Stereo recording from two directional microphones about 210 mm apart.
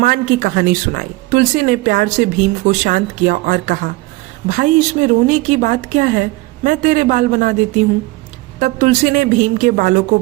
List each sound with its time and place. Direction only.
0.0 s speech: 40° right (ahead or behind)